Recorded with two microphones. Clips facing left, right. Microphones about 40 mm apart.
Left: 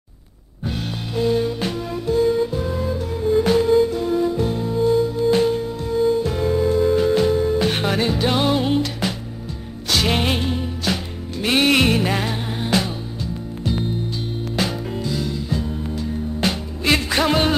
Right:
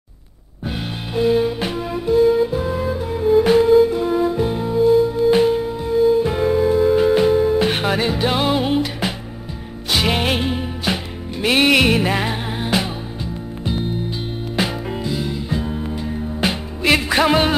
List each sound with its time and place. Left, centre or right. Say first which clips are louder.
0.7 s music: right 1 dB; centre
14.6 s music: right 2 dB; centre